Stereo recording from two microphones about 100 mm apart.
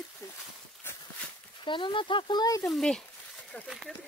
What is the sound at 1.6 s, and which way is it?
Speech, 55° left (ahead or behind).